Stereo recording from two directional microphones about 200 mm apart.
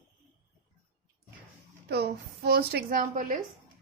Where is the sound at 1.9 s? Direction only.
55° right (ahead or behind).